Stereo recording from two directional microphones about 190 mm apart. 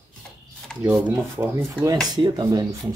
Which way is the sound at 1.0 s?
10° right (ahead or behind).